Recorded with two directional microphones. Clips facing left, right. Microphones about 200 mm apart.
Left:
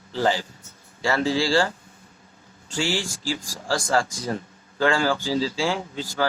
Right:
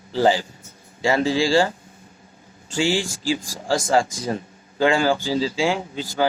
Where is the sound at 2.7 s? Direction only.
20° right (ahead or behind).